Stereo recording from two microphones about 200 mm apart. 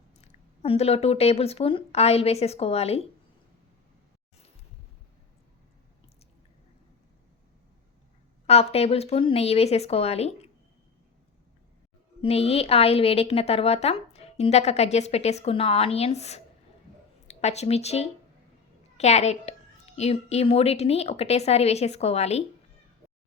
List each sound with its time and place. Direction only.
0.2 s a woman's voice: 30° left (ahead or behind)
8.4 s a woman's voice: 30° left (ahead or behind)
12.2 s a woman's voice: 30° left (ahead or behind)